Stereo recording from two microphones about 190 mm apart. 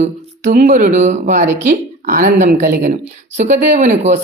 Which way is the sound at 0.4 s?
40° right (ahead or behind).